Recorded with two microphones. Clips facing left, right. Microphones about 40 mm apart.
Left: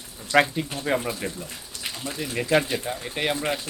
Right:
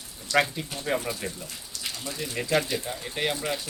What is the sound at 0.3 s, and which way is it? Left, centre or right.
Speech, centre.